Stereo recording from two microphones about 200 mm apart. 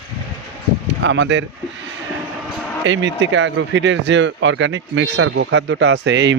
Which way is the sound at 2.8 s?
65° right (ahead or behind).